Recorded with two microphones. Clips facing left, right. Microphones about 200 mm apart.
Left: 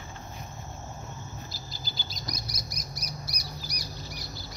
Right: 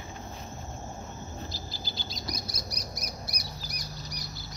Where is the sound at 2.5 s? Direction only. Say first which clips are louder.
Right 2 dB; 30° right (ahead or behind).